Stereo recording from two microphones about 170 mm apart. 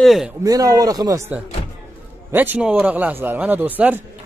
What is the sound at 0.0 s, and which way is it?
Speech, centre (ahead or behind).